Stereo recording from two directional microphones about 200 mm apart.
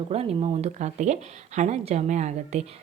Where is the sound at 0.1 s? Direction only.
30° right (ahead or behind).